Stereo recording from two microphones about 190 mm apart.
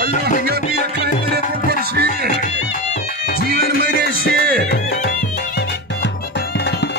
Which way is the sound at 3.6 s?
60° left (ahead or behind).